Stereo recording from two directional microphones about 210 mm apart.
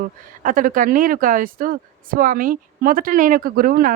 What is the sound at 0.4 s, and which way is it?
Speech, 40° right (ahead or behind).